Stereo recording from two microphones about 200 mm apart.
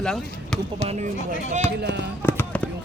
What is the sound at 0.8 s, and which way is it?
Speech, 35° right (ahead or behind).